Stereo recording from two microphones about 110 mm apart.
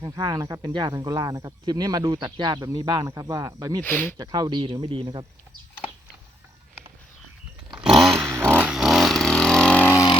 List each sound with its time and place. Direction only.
0.0 s speech: 35° right (ahead or behind)
3.8 s speech: 15° left (ahead or behind)
4.2 s speech: 40° right (ahead or behind)
7.9 s a sound: centre (ahead or behind)
8.3 s a sound: 25° right (ahead or behind)
8.6 s vehicle: 5° right (ahead or behind)